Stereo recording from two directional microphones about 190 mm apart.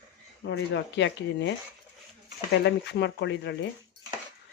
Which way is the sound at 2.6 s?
65° left (ahead or behind).